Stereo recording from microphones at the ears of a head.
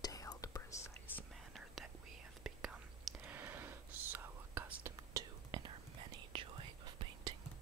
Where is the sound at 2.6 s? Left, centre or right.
Right.